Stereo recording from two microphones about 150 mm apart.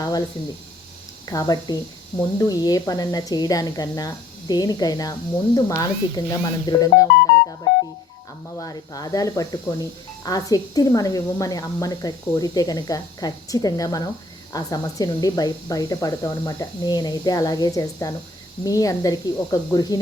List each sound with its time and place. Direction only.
0.0 s snake: 25° left (ahead or behind)
1.2 s speech: 25° left (ahead or behind)
8.5 s speech: 25° left (ahead or behind)